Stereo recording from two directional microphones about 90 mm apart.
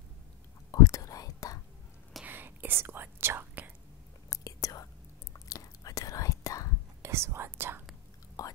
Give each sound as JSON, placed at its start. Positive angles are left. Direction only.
{"t": 0.7, "sound": "whispering", "side_deg": 40}
{"t": 2.2, "sound": "whispering", "side_deg": -20}
{"t": 4.3, "sound": "whispering", "side_deg": 40}
{"t": 7.0, "sound": "whispering", "side_deg": -30}
{"t": 8.4, "sound": "whispering", "side_deg": 40}